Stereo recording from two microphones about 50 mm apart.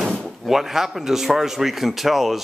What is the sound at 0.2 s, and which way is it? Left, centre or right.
Speech, centre.